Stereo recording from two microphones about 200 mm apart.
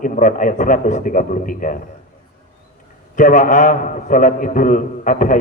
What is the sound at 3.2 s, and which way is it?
A man's voice, 40° left (ahead or behind).